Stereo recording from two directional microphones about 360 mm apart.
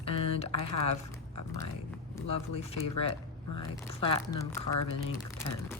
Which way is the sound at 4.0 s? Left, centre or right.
Centre.